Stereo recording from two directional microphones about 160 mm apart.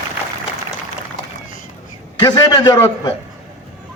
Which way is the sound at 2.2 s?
25° left (ahead or behind).